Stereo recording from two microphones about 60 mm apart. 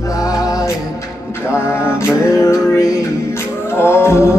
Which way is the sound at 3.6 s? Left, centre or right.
Left.